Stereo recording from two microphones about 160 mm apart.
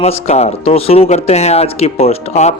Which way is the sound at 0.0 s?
40° left (ahead or behind).